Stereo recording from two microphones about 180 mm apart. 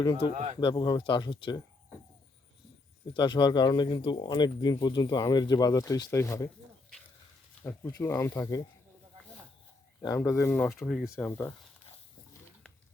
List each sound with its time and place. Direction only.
0.0 s speech: 25° left (ahead or behind)
0.3 s speech: 35° right (ahead or behind)
0.6 s speech: 25° left (ahead or behind)
3.1 s speech: 25° left (ahead or behind)
7.6 s speech: 15° left (ahead or behind)
10.0 s speech: 20° left (ahead or behind)